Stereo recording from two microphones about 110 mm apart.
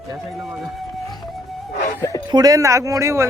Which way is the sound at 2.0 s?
30° left (ahead or behind).